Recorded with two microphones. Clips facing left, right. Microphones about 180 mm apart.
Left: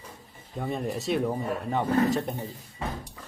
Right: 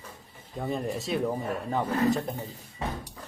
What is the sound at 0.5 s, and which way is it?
A man's voice, centre (ahead or behind).